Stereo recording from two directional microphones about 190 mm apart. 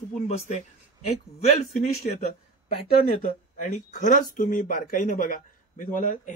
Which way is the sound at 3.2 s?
40° left (ahead or behind).